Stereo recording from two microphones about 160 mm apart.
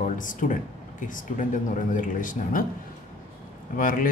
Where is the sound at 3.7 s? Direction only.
60° left (ahead or behind).